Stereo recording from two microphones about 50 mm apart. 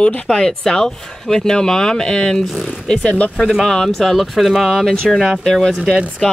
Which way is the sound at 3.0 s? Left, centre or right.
Left.